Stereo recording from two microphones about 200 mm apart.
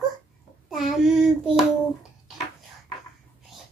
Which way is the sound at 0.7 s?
Centre (ahead or behind).